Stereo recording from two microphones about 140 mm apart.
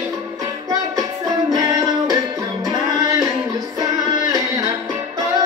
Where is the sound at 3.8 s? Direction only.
25° right (ahead or behind).